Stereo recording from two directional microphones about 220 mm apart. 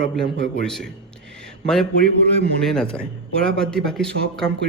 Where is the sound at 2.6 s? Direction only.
5° left (ahead or behind).